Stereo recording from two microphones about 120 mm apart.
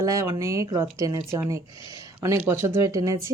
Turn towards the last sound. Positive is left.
turn(degrees=-30)  # may be behind; listen again after turning